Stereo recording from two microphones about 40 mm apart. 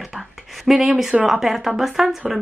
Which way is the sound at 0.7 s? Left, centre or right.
Centre.